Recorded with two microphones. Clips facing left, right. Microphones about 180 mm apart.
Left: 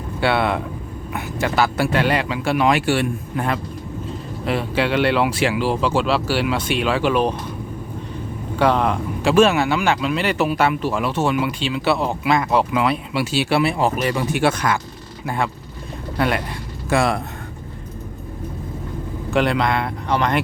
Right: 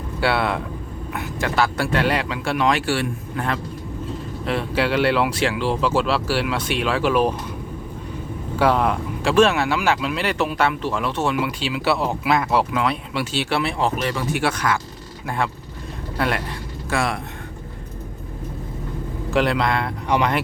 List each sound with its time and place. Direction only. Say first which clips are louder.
0.2 s speech: left 2 dB; centre (ahead or behind)
2.8 s a man's voice: left 3 dB; 20° left (ahead or behind)
4.4 s speech: left 1 dB; centre (ahead or behind)
8.5 s speech: left 1 dB; 5° right (ahead or behind); by 14.8 s 20° left (ahead or behind)
15.3 s speech: left 1 dB; centre (ahead or behind)
16.9 s speech: left 5 dB; 30° left (ahead or behind)
19.3 s speech: left 1 dB; centre (ahead or behind)